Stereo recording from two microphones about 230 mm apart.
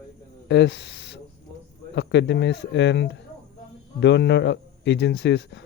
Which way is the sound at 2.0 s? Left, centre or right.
Left.